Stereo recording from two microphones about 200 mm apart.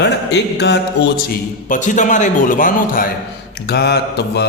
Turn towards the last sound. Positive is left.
turn(degrees=55)  # may be behind; listen again after turning